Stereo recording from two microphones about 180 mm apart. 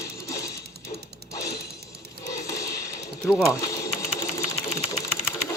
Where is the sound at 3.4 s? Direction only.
20° left (ahead or behind).